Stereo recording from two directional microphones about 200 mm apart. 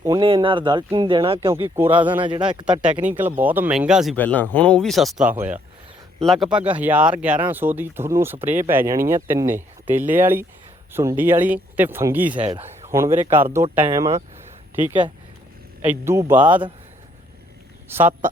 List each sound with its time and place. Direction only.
0.0 s speech: 20° right (ahead or behind)
1.7 s speech: 10° right (ahead or behind)
4.2 s speech: 10° left (ahead or behind); by 12.5 s 10° right (ahead or behind)
12.5 s speech: 30° right (ahead or behind)
12.9 s speech: 15° right (ahead or behind)
15.8 s speech: 10° right (ahead or behind)
17.8 s speech: 10° right (ahead or behind)